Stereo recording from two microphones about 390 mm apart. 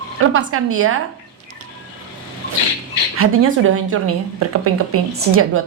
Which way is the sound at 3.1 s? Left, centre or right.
Right.